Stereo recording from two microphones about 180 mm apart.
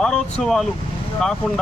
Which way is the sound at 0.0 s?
5° left (ahead or behind).